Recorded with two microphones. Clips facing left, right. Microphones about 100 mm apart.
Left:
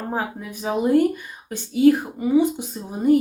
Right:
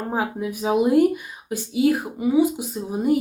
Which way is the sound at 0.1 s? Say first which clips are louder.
Right 4 dB; 10° right (ahead or behind).